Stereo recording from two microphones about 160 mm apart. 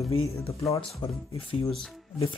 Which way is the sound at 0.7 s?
30° left (ahead or behind).